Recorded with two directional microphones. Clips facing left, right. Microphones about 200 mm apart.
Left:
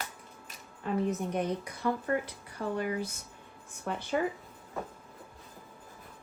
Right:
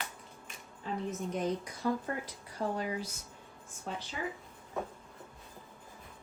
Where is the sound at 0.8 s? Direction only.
65° left (ahead or behind).